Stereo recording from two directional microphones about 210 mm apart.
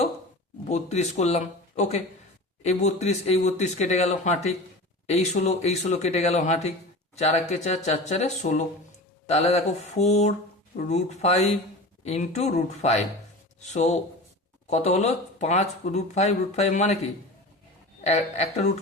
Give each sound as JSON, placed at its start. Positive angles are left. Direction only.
{"t": 0.7, "sound": "speech", "side_deg": 30}
{"t": 18.0, "sound": "speech", "side_deg": 30}